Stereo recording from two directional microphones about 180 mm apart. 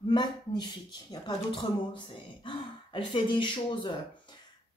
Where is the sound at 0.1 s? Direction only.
25° left (ahead or behind).